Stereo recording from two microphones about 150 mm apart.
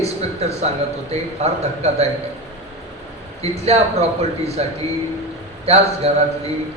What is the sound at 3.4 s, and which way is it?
A man's voice, 45° right (ahead or behind).